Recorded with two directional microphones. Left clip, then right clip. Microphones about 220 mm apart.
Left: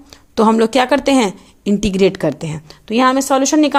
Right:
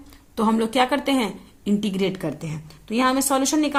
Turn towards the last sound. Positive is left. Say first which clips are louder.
# left 8 dB
turn(degrees=35)  # may be behind; listen again after turning